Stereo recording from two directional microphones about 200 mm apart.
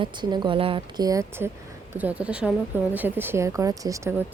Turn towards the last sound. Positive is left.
turn(degrees=-15)  # may be behind; listen again after turning